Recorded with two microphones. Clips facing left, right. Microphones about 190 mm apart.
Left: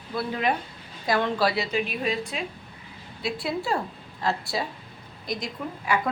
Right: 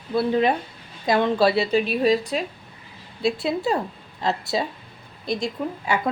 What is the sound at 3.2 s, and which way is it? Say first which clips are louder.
Speech: right 6 dB; 25° right (ahead or behind).